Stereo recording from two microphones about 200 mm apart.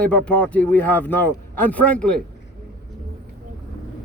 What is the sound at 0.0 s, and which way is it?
Speech, 5° left (ahead or behind).